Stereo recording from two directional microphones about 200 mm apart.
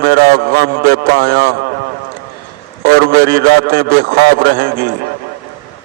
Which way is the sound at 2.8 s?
50° right (ahead or behind).